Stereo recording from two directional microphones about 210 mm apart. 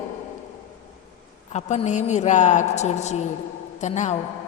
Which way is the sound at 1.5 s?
35° left (ahead or behind).